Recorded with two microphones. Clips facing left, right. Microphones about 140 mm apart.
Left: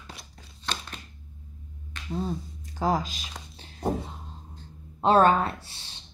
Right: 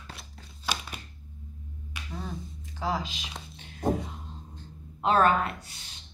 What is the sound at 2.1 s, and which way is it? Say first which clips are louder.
Speech: left 8 dB; 35° left (ahead or behind).